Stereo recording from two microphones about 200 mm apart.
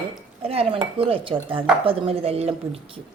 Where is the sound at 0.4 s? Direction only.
30° right (ahead or behind).